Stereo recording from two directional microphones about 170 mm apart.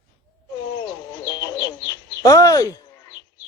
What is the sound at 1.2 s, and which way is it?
Bird, 20° left (ahead or behind).